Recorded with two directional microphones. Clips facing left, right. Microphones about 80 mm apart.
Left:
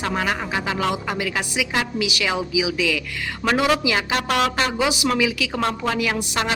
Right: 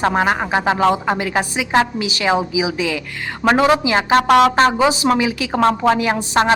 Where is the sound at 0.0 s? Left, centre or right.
Right.